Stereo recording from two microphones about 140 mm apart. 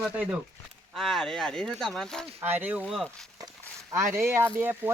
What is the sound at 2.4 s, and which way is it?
Speech, 15° right (ahead or behind).